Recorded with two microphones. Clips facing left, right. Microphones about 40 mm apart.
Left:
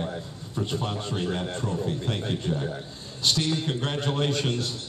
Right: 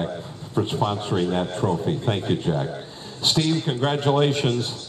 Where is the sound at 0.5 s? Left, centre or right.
Right.